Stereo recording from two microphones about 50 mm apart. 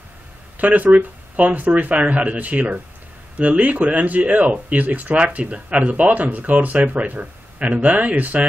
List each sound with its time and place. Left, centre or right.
0.6 s speech: right